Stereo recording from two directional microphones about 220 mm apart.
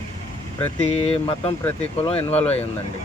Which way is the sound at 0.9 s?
25° left (ahead or behind).